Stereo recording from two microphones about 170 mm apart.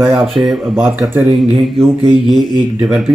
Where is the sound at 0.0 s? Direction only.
5° right (ahead or behind).